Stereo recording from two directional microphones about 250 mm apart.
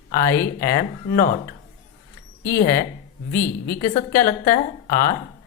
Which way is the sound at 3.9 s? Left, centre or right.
Left.